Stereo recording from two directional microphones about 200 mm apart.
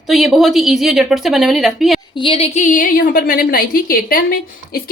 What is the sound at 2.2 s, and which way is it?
A woman's voice, 30° left (ahead or behind).